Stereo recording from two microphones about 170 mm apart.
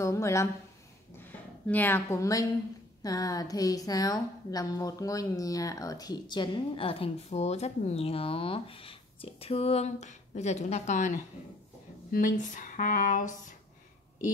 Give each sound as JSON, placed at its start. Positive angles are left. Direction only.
{"t": 0.0, "sound": "a woman's voice", "side_deg": 15}
{"t": 1.7, "sound": "a woman's voice", "side_deg": 10}